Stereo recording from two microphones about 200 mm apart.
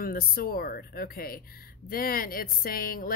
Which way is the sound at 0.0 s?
50° left (ahead or behind).